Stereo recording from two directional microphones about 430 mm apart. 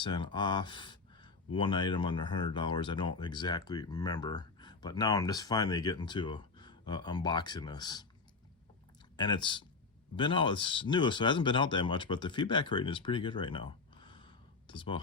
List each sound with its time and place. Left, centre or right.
0.0 s speech: centre
9.1 s speech: centre